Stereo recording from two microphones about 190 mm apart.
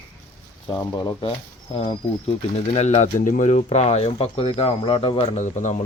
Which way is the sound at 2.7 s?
35° left (ahead or behind).